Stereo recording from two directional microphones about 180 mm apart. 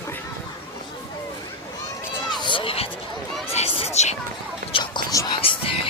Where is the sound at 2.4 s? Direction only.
30° left (ahead or behind).